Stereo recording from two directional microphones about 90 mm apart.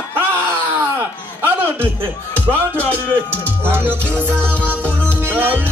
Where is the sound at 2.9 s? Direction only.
25° right (ahead or behind).